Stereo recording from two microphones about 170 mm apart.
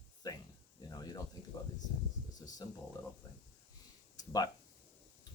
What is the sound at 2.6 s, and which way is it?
Speech, 25° left (ahead or behind).